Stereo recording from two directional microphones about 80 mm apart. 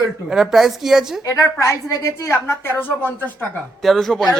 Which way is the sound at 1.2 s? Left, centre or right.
Left.